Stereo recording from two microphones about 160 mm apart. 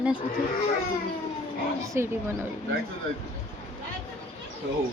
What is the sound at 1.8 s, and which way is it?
Speech, 15° right (ahead or behind).